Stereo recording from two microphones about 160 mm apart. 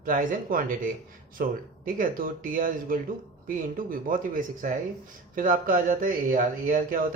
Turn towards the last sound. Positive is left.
turn(degrees=-55)  # may be behind; listen again after turning